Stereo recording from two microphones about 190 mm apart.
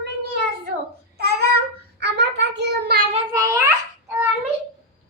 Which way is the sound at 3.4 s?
15° right (ahead or behind).